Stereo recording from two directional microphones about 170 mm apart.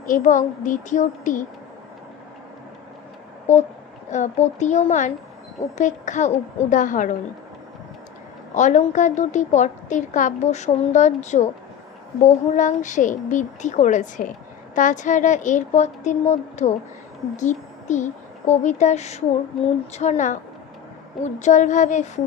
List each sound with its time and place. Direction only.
0.0 s a woman's voice: 50° left (ahead or behind)
3.5 s speech: 15° left (ahead or behind)
4.1 s a woman's voice: 45° left (ahead or behind)
8.5 s a woman's voice: 45° left (ahead or behind)
19.5 s speech: centre (ahead or behind)
19.9 s a woman's voice: 40° left (ahead or behind)
21.3 s a woman's voice: 45° left (ahead or behind)